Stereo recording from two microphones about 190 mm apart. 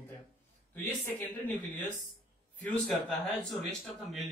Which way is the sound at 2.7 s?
5° left (ahead or behind).